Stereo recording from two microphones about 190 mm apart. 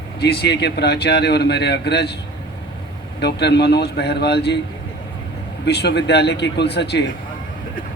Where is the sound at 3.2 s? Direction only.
60° left (ahead or behind).